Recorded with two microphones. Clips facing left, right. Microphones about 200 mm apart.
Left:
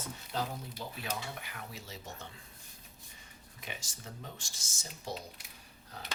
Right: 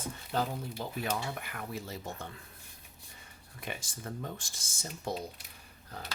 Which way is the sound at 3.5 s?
55° right (ahead or behind).